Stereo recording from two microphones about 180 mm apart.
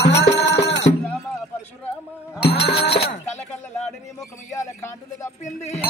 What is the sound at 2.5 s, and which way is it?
Music, 65° left (ahead or behind).